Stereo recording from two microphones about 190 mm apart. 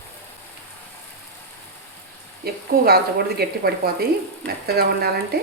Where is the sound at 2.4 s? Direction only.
55° right (ahead or behind).